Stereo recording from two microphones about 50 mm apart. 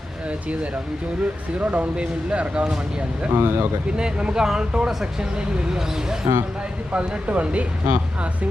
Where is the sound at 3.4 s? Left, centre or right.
Right.